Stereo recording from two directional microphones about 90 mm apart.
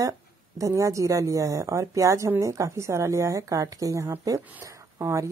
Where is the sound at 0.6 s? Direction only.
35° right (ahead or behind).